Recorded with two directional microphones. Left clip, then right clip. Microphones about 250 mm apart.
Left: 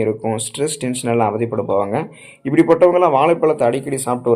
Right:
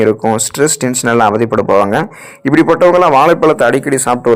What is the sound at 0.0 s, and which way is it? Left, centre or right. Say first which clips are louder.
A man's voice: right 8 dB; right.